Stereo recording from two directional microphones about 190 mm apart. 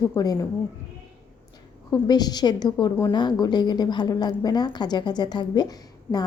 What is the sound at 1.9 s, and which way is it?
A woman's voice, 20° left (ahead or behind).